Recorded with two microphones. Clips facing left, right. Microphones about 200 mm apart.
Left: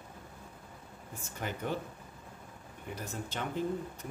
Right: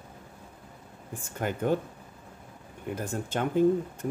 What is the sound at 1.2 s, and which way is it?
Speech, 50° right (ahead or behind).